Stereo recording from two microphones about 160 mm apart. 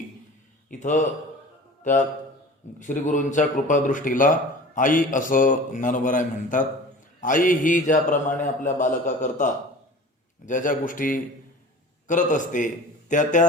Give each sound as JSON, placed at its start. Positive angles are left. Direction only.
{"t": 0.7, "sound": "a man's voice", "side_deg": 50}